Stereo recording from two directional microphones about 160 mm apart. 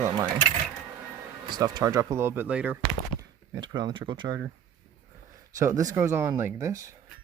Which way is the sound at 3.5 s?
30° right (ahead or behind).